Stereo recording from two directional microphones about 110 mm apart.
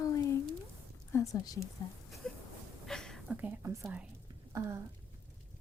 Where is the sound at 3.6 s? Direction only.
25° right (ahead or behind).